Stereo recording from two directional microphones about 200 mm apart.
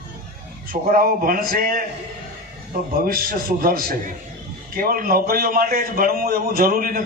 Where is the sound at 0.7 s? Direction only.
45° right (ahead or behind).